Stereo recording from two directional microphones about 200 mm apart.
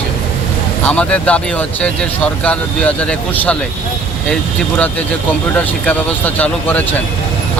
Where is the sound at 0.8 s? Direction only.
5° left (ahead or behind).